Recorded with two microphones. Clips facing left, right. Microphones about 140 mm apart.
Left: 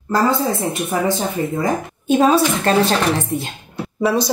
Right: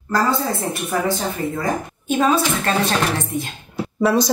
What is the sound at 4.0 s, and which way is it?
Speech, centre (ahead or behind).